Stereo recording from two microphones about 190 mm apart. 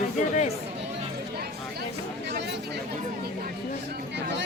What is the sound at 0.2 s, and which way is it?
Chatter, 40° left (ahead or behind).